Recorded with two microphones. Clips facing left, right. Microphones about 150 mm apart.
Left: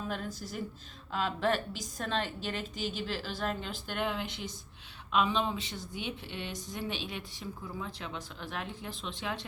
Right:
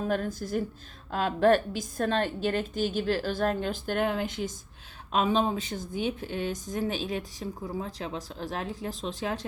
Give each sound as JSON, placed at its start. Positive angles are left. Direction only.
{"t": 0.0, "sound": "a woman's voice", "side_deg": -50}